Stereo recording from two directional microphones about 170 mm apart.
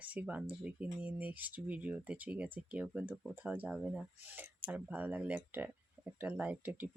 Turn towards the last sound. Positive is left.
turn(degrees=-10)  # may be behind; listen again after turning